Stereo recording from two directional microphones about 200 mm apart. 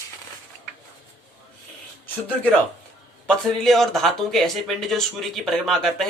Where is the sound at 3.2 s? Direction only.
Centre (ahead or behind).